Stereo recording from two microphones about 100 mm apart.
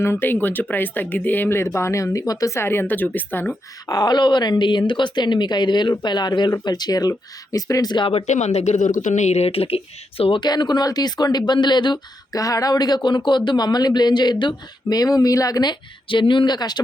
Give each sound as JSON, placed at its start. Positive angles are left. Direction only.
{"t": 0.0, "sound": "speech", "side_deg": 20}
{"t": 3.8, "sound": "speech", "side_deg": 45}
{"t": 8.0, "sound": "speech", "side_deg": 85}
{"t": 10.4, "sound": "speech", "side_deg": 45}